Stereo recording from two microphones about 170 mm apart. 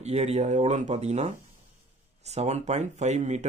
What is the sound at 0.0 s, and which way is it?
Speech, 40° right (ahead or behind).